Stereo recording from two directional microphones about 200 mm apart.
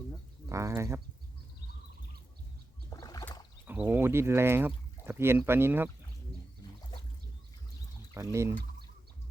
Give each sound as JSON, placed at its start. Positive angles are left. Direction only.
{"t": 0.4, "sound": "speech", "side_deg": -15}
{"t": 2.9, "sound": "rowboat", "side_deg": 20}
{"t": 3.7, "sound": "speech", "side_deg": -10}
{"t": 8.1, "sound": "speech", "side_deg": -15}